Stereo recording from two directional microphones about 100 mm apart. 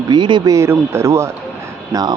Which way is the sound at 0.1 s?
50° right (ahead or behind).